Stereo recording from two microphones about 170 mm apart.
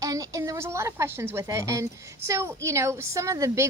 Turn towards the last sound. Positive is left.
turn(degrees=-15)  # may be behind; listen again after turning